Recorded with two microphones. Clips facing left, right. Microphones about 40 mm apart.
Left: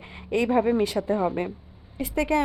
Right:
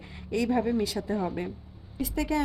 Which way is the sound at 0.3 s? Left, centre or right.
Left.